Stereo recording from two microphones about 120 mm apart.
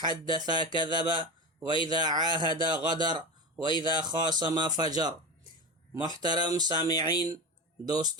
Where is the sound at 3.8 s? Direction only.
40° right (ahead or behind).